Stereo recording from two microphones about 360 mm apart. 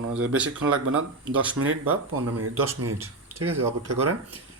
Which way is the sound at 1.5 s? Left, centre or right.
Right.